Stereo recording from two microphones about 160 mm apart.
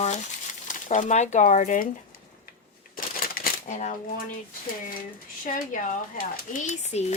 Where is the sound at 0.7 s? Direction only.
50° left (ahead or behind).